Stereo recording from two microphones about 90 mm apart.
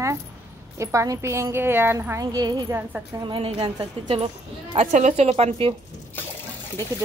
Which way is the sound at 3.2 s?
80° right.